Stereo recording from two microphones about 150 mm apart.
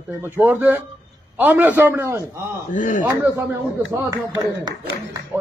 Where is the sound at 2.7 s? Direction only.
65° left (ahead or behind).